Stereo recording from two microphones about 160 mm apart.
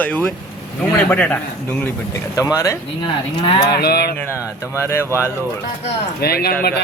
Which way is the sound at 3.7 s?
80° left.